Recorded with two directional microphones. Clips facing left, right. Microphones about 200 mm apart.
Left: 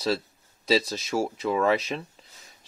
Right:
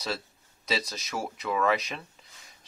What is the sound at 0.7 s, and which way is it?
Speech, 30° left (ahead or behind).